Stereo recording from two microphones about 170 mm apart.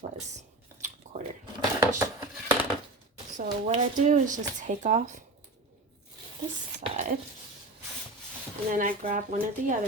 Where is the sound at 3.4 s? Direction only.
45° right (ahead or behind).